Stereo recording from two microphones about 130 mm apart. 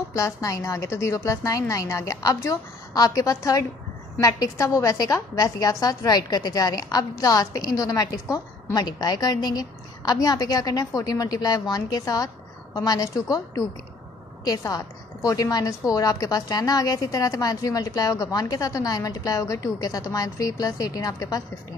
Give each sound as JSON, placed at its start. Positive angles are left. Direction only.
{"t": 0.1, "sound": "a woman's voice", "side_deg": 25}
{"t": 14.4, "sound": "a woman's voice", "side_deg": 25}